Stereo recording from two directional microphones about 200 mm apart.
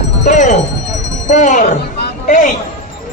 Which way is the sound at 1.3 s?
40° left (ahead or behind).